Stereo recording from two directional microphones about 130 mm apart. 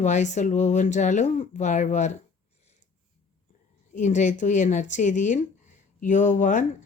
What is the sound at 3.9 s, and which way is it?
Speech, 70° left (ahead or behind).